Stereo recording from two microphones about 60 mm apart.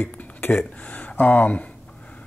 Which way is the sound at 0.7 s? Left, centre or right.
Left.